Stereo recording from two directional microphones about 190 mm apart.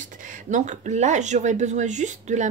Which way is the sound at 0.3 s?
40° right (ahead or behind).